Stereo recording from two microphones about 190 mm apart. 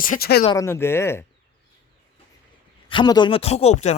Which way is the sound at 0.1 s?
55° left (ahead or behind).